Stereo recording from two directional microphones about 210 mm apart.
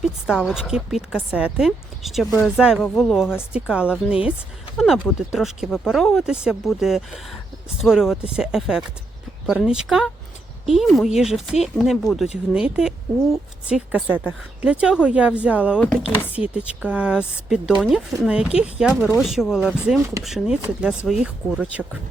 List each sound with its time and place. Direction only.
0.0 s speech: 5° right (ahead or behind)